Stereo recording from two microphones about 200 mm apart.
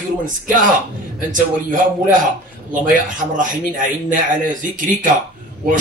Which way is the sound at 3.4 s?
40° right (ahead or behind).